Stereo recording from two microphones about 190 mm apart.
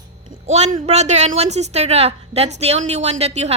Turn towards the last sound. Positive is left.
turn(degrees=-35)  # may be behind; listen again after turning